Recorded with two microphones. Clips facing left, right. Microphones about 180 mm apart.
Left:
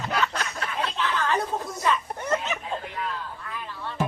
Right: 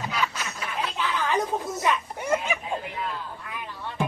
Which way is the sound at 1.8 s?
10° right (ahead or behind).